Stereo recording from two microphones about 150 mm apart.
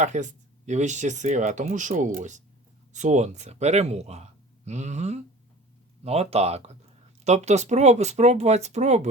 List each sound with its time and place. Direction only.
0.0 s speech: 55° right (ahead or behind)